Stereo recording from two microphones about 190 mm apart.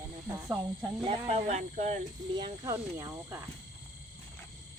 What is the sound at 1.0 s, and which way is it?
Speech, 35° right (ahead or behind).